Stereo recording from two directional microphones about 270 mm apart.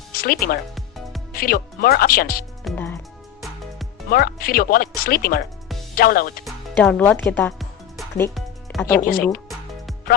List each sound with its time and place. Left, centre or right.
0.1 s speech: left
2.6 s music: centre
4.1 s speech: left
6.4 s music: centre
8.9 s speech: left